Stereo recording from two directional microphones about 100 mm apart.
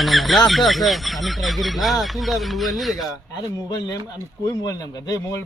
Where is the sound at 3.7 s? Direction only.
40° left (ahead or behind).